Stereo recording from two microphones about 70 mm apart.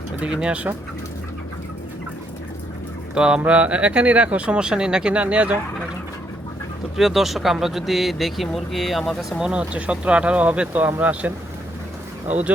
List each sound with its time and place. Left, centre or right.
0.2 s speech: centre
3.2 s speech: centre
6.9 s speech: centre
9.4 s speech: centre